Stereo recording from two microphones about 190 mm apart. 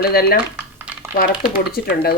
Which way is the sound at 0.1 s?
55° left (ahead or behind).